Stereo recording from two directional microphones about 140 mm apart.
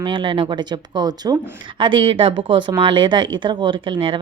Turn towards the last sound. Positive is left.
turn(degrees=-35)  # may be behind; listen again after turning